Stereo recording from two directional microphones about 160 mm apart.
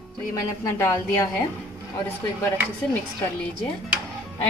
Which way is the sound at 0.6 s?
20° left (ahead or behind).